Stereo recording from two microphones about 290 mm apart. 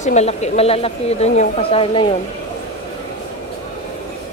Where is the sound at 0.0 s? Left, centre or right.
Left.